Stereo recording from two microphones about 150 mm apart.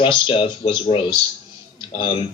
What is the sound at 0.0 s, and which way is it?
Speech, 35° left (ahead or behind).